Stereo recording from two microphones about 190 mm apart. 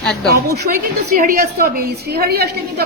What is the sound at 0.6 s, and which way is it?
A woman's voice, 45° right (ahead or behind).